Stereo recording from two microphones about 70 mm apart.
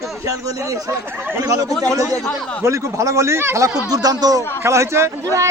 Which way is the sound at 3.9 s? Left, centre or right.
Right.